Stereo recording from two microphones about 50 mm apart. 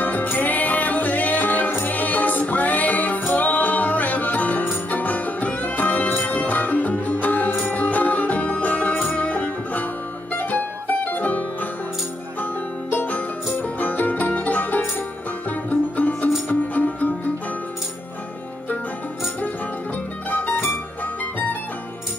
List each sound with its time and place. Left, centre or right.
0.0 s music: left
12.9 s music: left
20.2 s music: left